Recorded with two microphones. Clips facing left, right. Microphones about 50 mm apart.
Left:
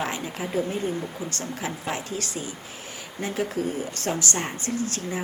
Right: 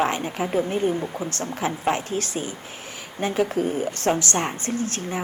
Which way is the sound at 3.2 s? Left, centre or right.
Right.